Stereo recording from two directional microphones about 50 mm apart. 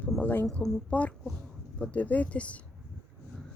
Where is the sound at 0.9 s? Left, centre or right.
Left.